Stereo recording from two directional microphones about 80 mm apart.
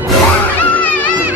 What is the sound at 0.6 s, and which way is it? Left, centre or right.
Music, centre.